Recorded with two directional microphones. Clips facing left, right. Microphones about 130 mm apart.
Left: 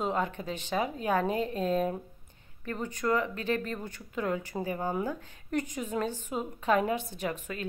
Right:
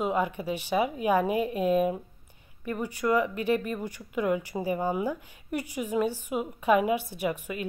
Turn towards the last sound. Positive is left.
turn(degrees=-10)  # may be behind; listen again after turning